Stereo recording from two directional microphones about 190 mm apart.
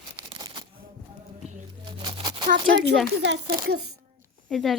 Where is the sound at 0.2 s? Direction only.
25° right (ahead or behind).